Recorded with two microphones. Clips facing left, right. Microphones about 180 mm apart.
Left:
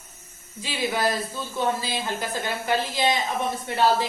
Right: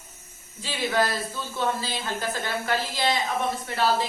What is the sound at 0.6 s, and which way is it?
Speech, 15° left (ahead or behind).